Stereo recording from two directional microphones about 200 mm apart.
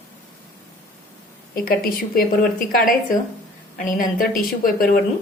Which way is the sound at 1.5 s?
45° left (ahead or behind).